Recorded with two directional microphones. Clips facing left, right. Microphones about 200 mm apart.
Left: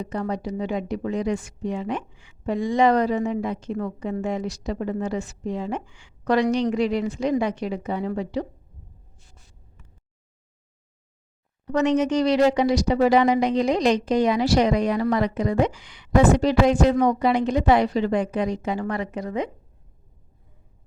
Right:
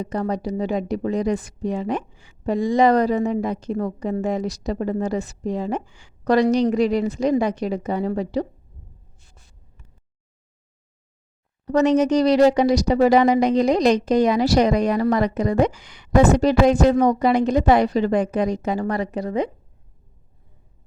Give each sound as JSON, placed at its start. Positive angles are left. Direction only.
{"t": 0.0, "sound": "speech", "side_deg": -40}
{"t": 11.6, "sound": "speech", "side_deg": -40}